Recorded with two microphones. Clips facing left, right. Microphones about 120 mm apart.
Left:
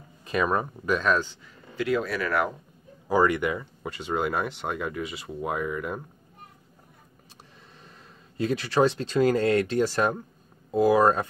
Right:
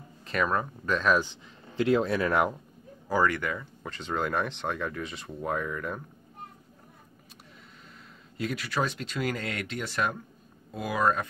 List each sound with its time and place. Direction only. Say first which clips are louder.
0.2 s speech: left 3 dB; 15° left (ahead or behind)
1.2 s speech: left 1 dB; 25° right (ahead or behind)
3.1 s speech: left 4 dB; 20° left (ahead or behind)
8.4 s speech: left 7 dB; 30° left (ahead or behind)